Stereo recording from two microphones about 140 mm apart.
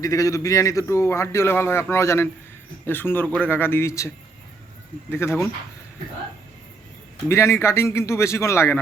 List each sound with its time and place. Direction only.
0.0 s a man's voice: 25° left (ahead or behind)
5.1 s speech: 15° left (ahead or behind)
7.3 s a man's voice: 20° left (ahead or behind)